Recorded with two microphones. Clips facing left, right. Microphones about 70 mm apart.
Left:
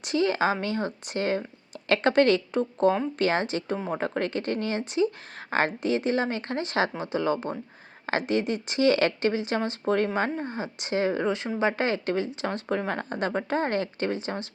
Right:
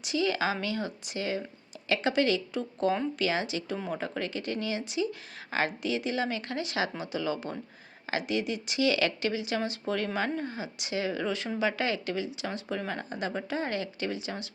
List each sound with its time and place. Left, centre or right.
0.0 s a woman's voice: left